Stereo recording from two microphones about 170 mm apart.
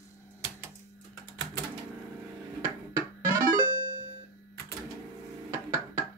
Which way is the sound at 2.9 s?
15° right (ahead or behind).